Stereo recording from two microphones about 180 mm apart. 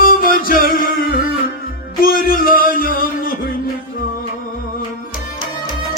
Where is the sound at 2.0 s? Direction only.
55° left (ahead or behind).